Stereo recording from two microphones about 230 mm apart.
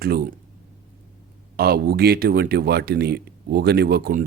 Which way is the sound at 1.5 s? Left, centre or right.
Right.